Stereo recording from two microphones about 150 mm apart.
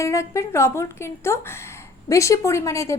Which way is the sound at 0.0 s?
20° left (ahead or behind).